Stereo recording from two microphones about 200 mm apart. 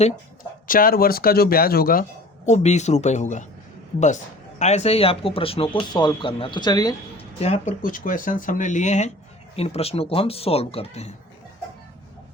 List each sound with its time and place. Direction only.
0.7 s speech: 45° left (ahead or behind)
2.5 s speech: 35° left (ahead or behind)
4.6 s speech: 35° left (ahead or behind)